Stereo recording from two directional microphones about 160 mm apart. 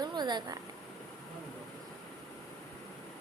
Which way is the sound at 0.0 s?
25° right (ahead or behind).